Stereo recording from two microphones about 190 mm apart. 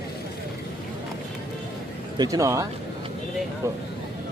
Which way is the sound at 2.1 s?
20° right (ahead or behind).